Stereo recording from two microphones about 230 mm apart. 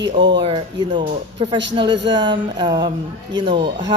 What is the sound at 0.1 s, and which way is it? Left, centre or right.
A woman's voice, centre.